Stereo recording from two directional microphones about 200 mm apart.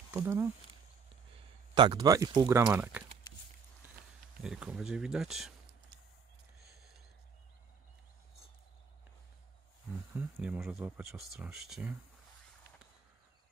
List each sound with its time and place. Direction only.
0.1 s speech: 10° right (ahead or behind)
1.8 s speech: 20° right (ahead or behind)
4.4 s speech: 5° right (ahead or behind)
10.1 s speech: 5° right (ahead or behind)